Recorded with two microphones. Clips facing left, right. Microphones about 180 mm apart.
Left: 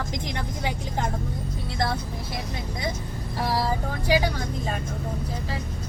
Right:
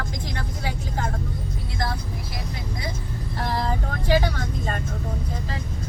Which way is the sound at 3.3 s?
5° left (ahead or behind).